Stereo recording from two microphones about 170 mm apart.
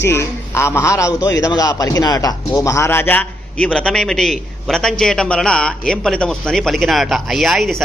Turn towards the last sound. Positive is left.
turn(degrees=0)  # may be behind; listen again after turning